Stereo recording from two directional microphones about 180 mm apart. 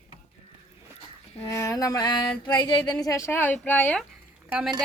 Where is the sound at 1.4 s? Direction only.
15° left (ahead or behind).